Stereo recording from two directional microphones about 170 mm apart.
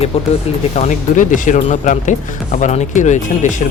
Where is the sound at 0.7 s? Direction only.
45° left (ahead or behind).